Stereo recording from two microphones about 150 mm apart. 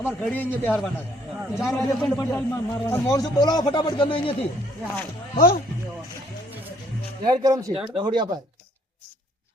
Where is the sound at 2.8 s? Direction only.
10° left (ahead or behind).